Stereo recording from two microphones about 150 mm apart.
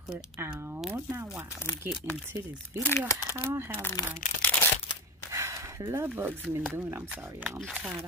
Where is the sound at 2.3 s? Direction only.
20° right (ahead or behind).